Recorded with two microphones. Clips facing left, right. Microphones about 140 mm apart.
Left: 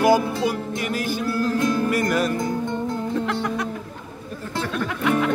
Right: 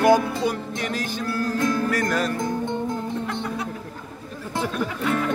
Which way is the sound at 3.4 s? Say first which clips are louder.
Left 3 dB; 90° left.